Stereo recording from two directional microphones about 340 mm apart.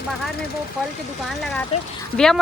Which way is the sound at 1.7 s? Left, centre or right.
Centre.